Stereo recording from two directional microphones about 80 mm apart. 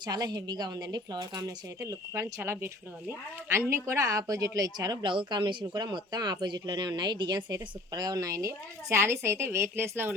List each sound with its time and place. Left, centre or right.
0.0 s speech: right
2.4 s speech: right
5.0 s speech: right
5.7 s speech: right